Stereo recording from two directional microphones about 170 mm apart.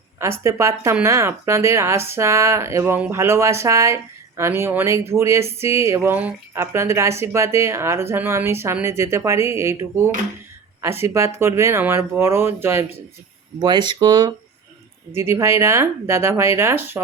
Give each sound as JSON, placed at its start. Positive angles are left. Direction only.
{"t": 0.2, "sound": "speech", "side_deg": -15}
{"t": 13.6, "sound": "speech", "side_deg": -25}
{"t": 15.1, "sound": "speech", "side_deg": -15}